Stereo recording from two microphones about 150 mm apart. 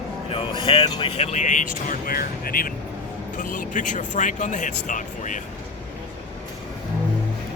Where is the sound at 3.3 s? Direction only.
60° left (ahead or behind).